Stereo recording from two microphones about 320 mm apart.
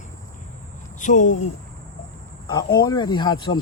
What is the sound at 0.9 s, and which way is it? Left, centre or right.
Speech, left.